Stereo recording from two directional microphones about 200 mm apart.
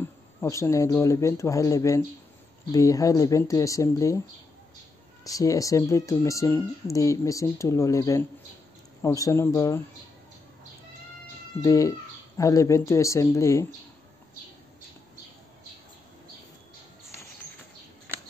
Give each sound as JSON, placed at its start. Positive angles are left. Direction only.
{"t": 0.4, "sound": "speech", "side_deg": 15}
{"t": 5.2, "sound": "speech", "side_deg": 15}
{"t": 11.6, "sound": "speech", "side_deg": 15}